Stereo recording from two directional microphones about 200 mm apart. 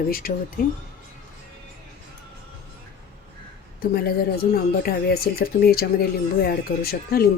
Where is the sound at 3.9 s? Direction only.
50° left (ahead or behind).